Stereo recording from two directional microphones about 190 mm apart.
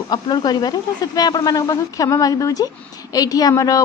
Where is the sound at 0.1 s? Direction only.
20° left (ahead or behind).